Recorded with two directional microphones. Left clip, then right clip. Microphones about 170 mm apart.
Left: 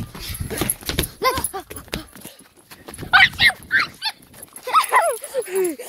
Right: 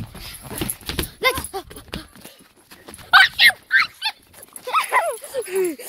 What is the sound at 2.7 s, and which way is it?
Dog, 50° left (ahead or behind).